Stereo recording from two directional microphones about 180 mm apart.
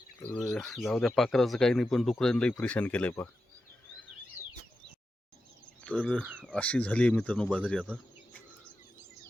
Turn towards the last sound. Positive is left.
turn(degrees=5)  # may be behind; listen again after turning